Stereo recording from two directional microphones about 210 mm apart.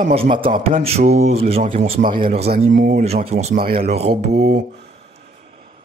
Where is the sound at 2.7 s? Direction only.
40° right (ahead or behind).